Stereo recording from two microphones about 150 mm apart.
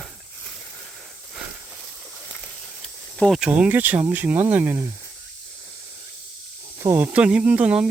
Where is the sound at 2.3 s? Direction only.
5° left (ahead or behind).